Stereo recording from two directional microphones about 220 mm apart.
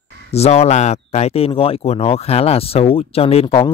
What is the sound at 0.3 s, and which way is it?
Speech, 30° left (ahead or behind).